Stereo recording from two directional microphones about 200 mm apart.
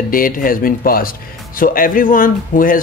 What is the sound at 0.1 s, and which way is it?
Speech, 45° left (ahead or behind).